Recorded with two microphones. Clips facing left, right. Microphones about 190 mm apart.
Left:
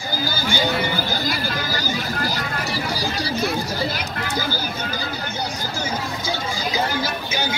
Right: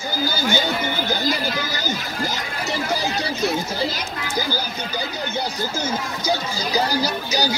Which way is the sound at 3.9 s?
60° left (ahead or behind).